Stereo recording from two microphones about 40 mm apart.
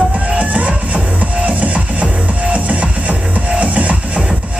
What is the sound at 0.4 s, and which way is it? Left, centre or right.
Music, right.